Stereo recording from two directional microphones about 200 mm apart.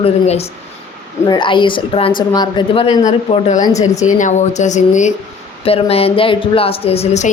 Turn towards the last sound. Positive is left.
turn(degrees=35)  # may be behind; listen again after turning